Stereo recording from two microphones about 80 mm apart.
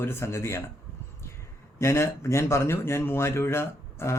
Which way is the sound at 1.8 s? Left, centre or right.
Left.